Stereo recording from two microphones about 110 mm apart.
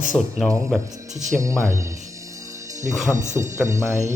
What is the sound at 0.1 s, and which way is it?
Speech, 15° left (ahead or behind).